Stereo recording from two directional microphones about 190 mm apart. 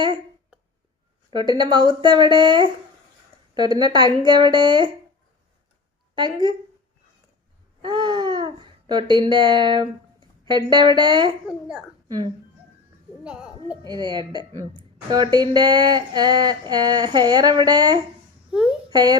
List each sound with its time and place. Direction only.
1.3 s a woman's voice: 25° right (ahead or behind)
3.8 s a woman's voice: 25° right (ahead or behind)
6.1 s a woman's voice: 25° right (ahead or behind)
7.8 s babbling: 25° right (ahead or behind)
11.4 s a child's voice: 5° right (ahead or behind)
12.0 s speech: 20° right (ahead or behind)
13.2 s a child's voice: 5° right (ahead or behind)
13.8 s a woman's voice: 25° right (ahead or behind)
18.5 s speech: 5° right (ahead or behind)
18.9 s speech: 20° right (ahead or behind)